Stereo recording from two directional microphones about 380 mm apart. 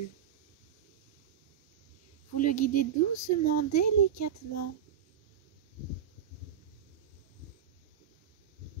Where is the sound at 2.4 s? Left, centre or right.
Left.